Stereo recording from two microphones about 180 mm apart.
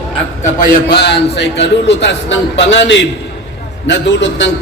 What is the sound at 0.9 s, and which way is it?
A man's voice, 70° left (ahead or behind).